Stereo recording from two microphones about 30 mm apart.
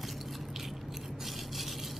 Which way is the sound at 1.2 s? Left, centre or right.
Centre.